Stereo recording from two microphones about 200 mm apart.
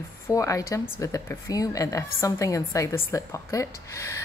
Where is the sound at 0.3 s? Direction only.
15° left (ahead or behind).